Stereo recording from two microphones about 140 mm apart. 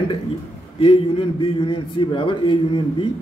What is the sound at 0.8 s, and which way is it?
A man's voice, 40° left (ahead or behind).